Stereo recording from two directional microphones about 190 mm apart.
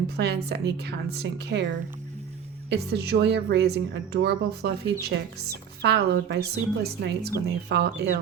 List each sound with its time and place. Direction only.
0.4 s a woman's voice: 60° right (ahead or behind)
2.6 s a woman's voice: 60° right (ahead or behind)